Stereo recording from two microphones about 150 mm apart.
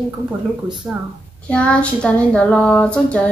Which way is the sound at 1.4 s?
10° left (ahead or behind).